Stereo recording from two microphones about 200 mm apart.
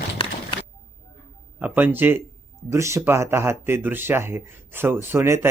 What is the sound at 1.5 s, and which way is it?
Speech, 10° right (ahead or behind).